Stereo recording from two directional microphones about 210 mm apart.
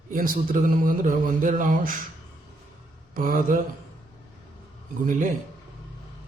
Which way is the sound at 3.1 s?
40° right (ahead or behind).